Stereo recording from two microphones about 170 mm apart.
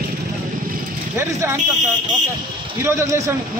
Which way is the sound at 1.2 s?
15° right (ahead or behind).